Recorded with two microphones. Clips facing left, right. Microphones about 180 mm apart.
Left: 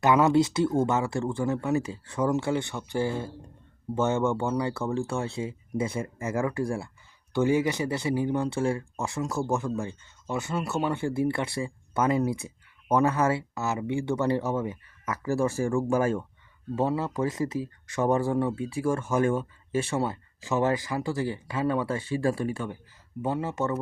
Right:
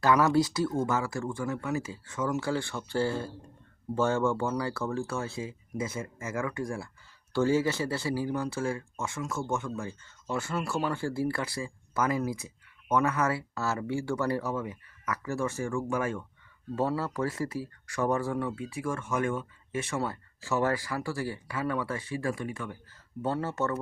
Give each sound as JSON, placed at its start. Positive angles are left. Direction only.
{"t": 0.0, "sound": "speech", "side_deg": 20}
{"t": 16.7, "sound": "speech", "side_deg": 20}
{"t": 22.9, "sound": "speech", "side_deg": 15}